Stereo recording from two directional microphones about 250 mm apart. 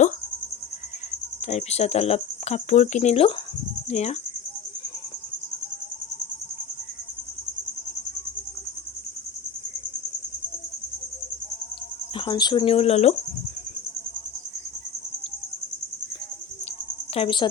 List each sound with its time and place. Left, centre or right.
1.5 s speech: left
12.1 s speech: centre
17.2 s speech: centre